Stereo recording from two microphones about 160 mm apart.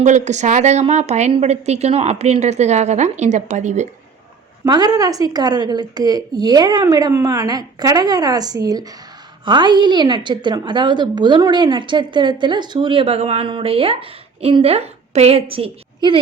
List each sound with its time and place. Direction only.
0.0 s a woman's voice: 45° right (ahead or behind)
4.6 s a woman's voice: 25° right (ahead or behind)